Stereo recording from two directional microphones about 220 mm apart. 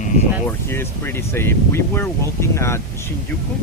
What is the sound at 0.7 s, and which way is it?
Speech, 10° left (ahead or behind).